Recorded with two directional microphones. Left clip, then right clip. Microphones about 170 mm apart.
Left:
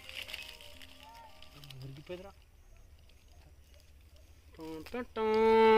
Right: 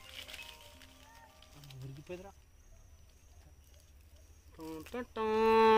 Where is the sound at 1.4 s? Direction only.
25° left (ahead or behind).